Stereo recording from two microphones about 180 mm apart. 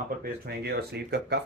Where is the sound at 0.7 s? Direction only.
65° right (ahead or behind).